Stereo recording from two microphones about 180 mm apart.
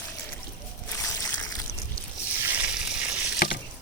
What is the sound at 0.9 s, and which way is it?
Boat, 15° left (ahead or behind).